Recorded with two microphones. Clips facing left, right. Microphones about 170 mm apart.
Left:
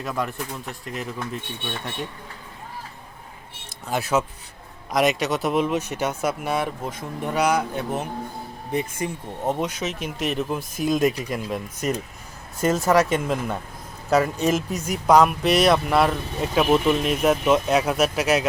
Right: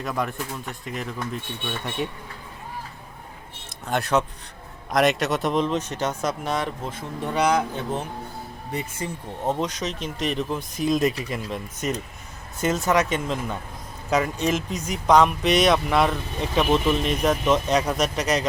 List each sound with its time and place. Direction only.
0.0 s speech: centre (ahead or behind)
3.8 s speech: 5° left (ahead or behind)
12.9 s speech: 5° left (ahead or behind)